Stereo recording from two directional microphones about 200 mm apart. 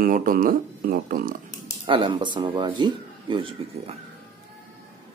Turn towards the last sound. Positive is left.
turn(degrees=-25)  # may be behind; listen again after turning